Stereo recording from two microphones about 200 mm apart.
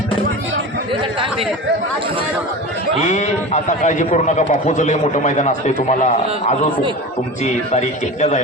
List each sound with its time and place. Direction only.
3.0 s a man's voice: 35° left (ahead or behind)
7.4 s a man's voice: 35° left (ahead or behind)